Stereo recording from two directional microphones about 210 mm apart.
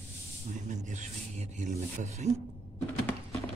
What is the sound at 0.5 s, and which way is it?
Rub, 35° right (ahead or behind).